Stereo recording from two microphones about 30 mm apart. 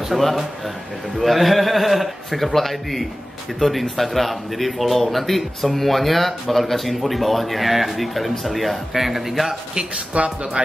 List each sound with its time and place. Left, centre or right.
0.2 s speech: centre
9.9 s speech: right